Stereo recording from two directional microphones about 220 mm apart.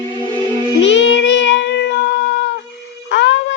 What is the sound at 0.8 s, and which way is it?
Child singing, 55° left (ahead or behind).